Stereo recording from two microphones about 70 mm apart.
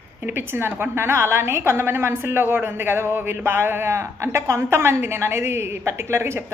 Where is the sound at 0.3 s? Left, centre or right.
Right.